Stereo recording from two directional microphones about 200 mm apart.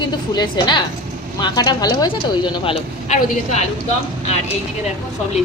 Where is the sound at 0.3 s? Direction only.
20° left (ahead or behind).